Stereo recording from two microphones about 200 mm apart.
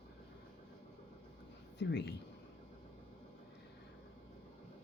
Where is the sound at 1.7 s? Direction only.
60° left (ahead or behind).